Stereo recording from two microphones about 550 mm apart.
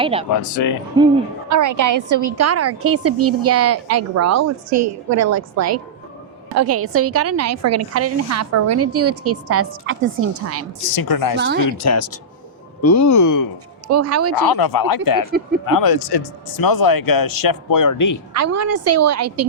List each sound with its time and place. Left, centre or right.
0.0 s speech: centre
0.5 s a man's voice: left
1.5 s a woman's voice: right
10.9 s a man's voice: left
11.3 s a woman's voice: centre
11.6 s a man's voice: left
13.8 s a woman's voice: right
14.5 s a man's voice: left
18.3 s a woman's voice: right